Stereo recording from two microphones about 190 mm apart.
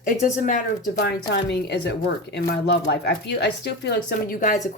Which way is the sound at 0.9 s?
60° left (ahead or behind).